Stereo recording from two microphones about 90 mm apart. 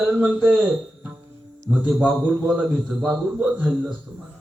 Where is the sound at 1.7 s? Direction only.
Centre (ahead or behind).